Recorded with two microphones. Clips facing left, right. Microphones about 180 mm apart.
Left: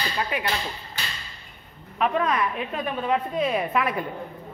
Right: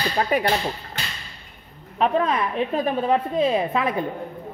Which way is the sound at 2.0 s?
30° right (ahead or behind).